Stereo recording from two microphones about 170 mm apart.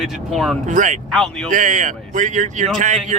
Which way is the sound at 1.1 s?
5° left (ahead or behind).